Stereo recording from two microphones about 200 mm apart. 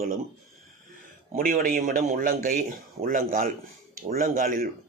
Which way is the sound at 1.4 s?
45° right (ahead or behind).